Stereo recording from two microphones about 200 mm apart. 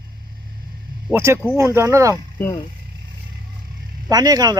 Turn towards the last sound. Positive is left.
turn(degrees=-20)  # may be behind; listen again after turning